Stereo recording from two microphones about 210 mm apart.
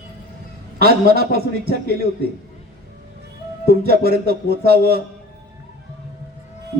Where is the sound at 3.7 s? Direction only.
45° right (ahead or behind).